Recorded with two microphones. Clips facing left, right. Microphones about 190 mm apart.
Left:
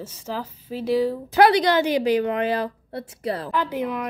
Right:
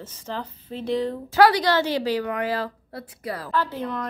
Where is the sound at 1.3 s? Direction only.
20° left (ahead or behind).